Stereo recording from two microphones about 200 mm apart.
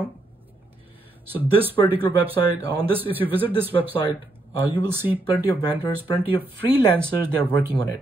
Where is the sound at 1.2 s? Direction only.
10° right (ahead or behind).